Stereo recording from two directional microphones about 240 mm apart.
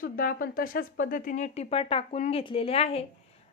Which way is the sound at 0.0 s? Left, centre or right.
Left.